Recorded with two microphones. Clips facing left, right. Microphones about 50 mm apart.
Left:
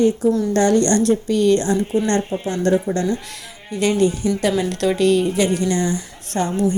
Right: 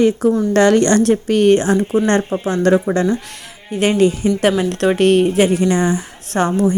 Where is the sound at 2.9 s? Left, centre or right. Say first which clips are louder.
Right 4 dB; right.